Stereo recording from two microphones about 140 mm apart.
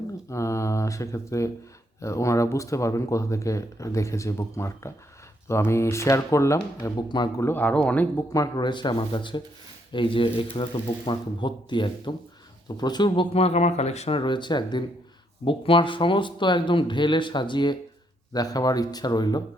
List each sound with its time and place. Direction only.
0.3 s speech: 20° left (ahead or behind)
7.4 s speech: 10° left (ahead or behind)
8.3 s speech: 25° left (ahead or behind); by 14.2 s 50° left (ahead or behind)
14.2 s speech: 35° left (ahead or behind)